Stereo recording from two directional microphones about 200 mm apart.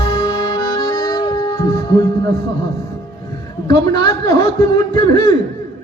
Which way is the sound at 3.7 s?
20° left (ahead or behind).